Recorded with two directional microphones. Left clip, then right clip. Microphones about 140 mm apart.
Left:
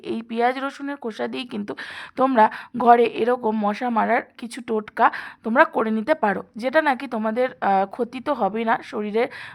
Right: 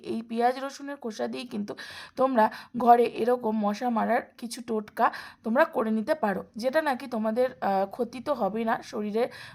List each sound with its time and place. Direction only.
0.1 s speech: 20° left (ahead or behind)